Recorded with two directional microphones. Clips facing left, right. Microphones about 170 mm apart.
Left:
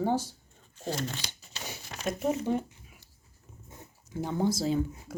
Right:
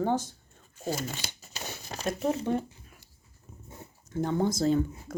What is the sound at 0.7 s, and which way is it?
Speech, 5° right (ahead or behind).